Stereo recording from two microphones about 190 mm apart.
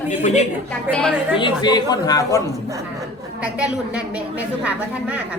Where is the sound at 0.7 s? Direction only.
5° left (ahead or behind).